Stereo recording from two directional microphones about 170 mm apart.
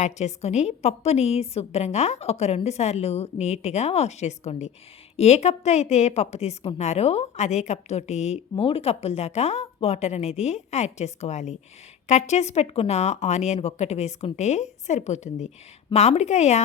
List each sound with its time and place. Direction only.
0.0 s a woman's voice: 40° left (ahead or behind)